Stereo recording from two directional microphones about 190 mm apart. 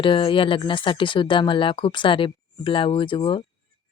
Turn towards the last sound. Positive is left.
turn(degrees=30)  # may be behind; listen again after turning